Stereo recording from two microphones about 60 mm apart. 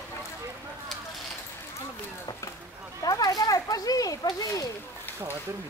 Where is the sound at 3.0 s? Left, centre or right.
Left.